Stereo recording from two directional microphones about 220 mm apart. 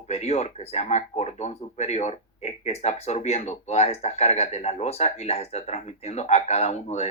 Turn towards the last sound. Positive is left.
turn(degrees=30)  # may be behind; listen again after turning